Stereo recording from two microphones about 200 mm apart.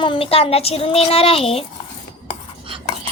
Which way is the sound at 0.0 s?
25° left (ahead or behind).